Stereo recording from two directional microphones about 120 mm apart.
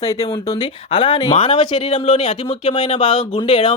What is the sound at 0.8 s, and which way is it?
Speech, 45° left (ahead or behind).